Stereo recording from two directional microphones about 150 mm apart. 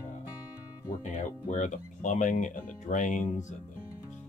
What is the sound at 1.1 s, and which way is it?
Speech, 55° left (ahead or behind).